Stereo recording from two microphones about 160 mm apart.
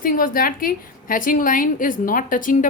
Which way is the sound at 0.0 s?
60° left (ahead or behind).